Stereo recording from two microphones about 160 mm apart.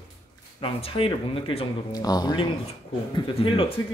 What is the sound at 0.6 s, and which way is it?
Speech, 35° left (ahead or behind).